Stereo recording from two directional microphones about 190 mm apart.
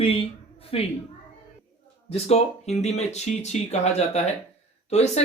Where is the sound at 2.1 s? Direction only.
35° left (ahead or behind).